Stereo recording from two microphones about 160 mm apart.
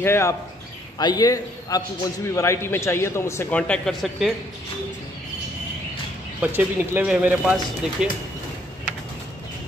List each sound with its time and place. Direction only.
0.0 s a man's voice: 15° left (ahead or behind)
6.4 s speech: 10° right (ahead or behind)